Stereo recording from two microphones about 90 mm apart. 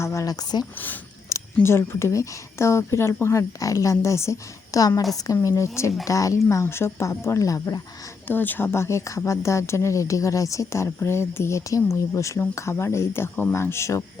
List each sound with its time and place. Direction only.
0.0 s speech: 35° left (ahead or behind)
1.3 s a sound: 35° left (ahead or behind)
1.6 s speech: 30° left (ahead or behind)
8.3 s speech: 20° left (ahead or behind)